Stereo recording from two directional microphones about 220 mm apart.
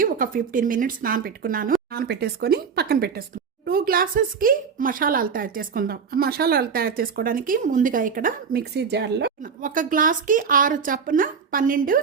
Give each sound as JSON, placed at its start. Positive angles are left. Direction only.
{"t": 0.0, "sound": "speech", "side_deg": -40}